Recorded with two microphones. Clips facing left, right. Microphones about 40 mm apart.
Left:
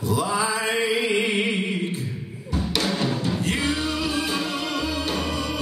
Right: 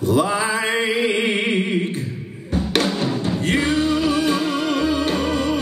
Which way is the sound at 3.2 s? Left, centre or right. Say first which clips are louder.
Right 4 dB; right.